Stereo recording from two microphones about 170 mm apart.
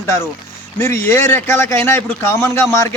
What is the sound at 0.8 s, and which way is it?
Speech, 15° left (ahead or behind).